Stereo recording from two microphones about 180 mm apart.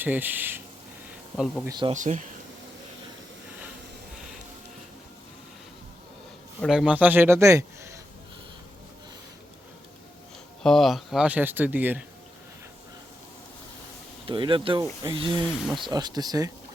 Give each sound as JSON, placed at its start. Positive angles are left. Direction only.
{"t": 0.0, "sound": "speech", "side_deg": -10}
{"t": 1.6, "sound": "speech", "side_deg": -25}
{"t": 1.9, "sound": "speech", "side_deg": -40}
{"t": 6.6, "sound": "speech", "side_deg": -5}
{"t": 10.6, "sound": "speech", "side_deg": 0}
{"t": 14.3, "sound": "speech", "side_deg": -30}
{"t": 15.6, "sound": "speech", "side_deg": 0}
{"t": 15.9, "sound": "speech", "side_deg": -20}